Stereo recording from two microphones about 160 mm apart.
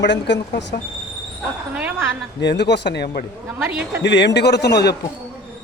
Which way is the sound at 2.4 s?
90° left.